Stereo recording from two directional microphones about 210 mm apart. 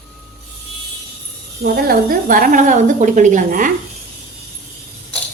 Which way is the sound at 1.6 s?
45° right (ahead or behind).